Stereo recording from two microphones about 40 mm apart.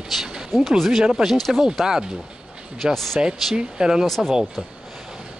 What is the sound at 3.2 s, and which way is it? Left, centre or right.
Speech, centre.